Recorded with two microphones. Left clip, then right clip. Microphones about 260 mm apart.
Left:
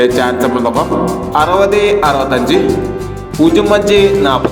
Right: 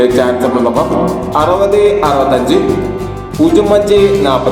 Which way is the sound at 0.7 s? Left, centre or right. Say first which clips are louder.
Right 1 dB; centre.